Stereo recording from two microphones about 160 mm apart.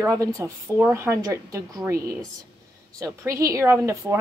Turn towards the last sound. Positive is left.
turn(degrees=-15)  # may be behind; listen again after turning